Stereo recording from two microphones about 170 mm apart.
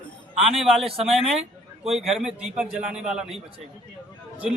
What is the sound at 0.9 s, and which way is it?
Speech, centre (ahead or behind).